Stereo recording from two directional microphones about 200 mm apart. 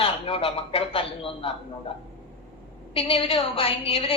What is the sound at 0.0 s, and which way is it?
A woman's voice, 30° left (ahead or behind).